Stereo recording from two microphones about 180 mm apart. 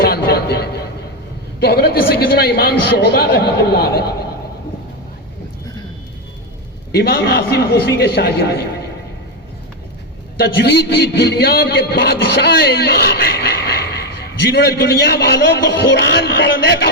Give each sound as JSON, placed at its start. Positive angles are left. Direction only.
{"t": 0.0, "sound": "a sound", "side_deg": 60}
{"t": 1.6, "sound": "a man's voice", "side_deg": 60}
{"t": 6.9, "sound": "a man's voice", "side_deg": 60}
{"t": 10.3, "sound": "a man's voice", "side_deg": 65}